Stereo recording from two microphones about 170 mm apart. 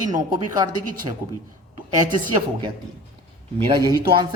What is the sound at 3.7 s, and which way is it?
Speech, 25° right (ahead or behind).